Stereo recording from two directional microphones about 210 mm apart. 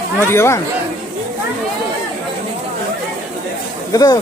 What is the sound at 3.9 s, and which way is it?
Speech, 15° left (ahead or behind).